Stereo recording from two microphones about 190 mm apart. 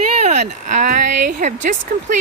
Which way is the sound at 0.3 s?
40° right (ahead or behind).